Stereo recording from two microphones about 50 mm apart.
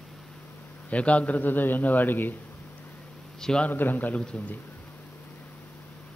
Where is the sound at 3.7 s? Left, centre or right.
Left.